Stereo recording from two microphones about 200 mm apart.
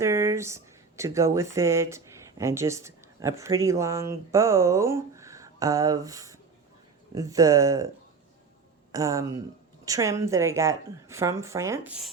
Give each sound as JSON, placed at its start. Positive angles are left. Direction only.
{"t": 0.0, "sound": "a woman's voice", "side_deg": -15}
{"t": 8.9, "sound": "a woman's voice", "side_deg": -15}